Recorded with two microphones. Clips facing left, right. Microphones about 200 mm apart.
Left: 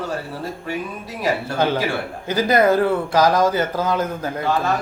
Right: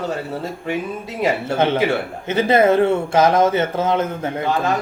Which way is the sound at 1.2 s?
25° right (ahead or behind).